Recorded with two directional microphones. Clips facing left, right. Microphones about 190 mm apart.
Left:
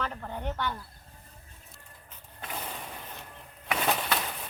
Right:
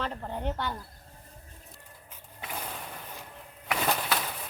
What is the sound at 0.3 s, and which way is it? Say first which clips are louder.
Speech: right 1 dB; 30° right (ahead or behind).